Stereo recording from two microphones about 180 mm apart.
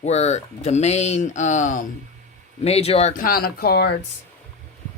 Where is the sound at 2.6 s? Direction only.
35° left (ahead or behind); by 3.9 s 60° left (ahead or behind).